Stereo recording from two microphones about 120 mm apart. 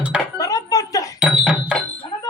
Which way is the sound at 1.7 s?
10° right (ahead or behind).